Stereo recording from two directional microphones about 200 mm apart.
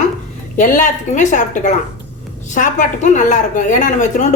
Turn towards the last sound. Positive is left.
turn(degrees=40)  # may be behind; listen again after turning